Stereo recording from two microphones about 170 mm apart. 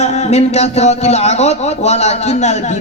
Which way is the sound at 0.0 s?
40° left (ahead or behind).